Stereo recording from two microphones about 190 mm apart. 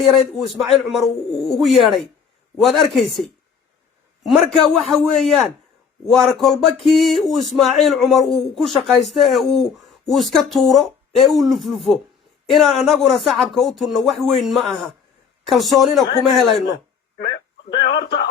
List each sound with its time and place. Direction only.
0.1 s speech: centre (ahead or behind)
4.2 s speech: centre (ahead or behind)
17.2 s a sound: 50° left (ahead or behind)